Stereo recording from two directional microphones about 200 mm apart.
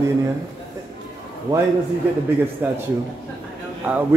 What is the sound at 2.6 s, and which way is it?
Speech, 10° right (ahead or behind).